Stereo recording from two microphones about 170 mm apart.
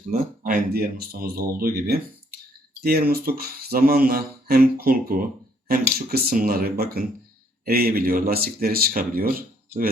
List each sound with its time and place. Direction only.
0.4 s speech: 60° right (ahead or behind)